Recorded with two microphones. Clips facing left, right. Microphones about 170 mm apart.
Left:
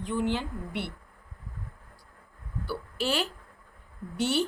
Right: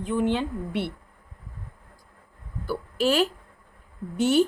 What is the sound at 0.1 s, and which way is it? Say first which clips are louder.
Speech: right 5 dB; 55° right (ahead or behind).